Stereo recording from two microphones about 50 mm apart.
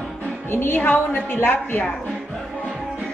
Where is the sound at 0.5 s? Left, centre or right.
Left.